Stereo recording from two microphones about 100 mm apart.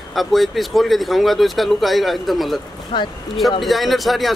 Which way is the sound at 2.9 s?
50° left (ahead or behind).